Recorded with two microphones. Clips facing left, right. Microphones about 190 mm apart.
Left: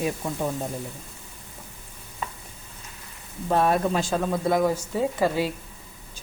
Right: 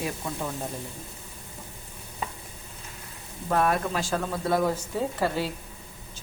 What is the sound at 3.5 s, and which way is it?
Speech, 25° left (ahead or behind).